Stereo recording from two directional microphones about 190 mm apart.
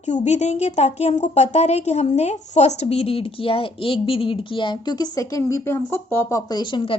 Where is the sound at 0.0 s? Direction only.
40° left (ahead or behind).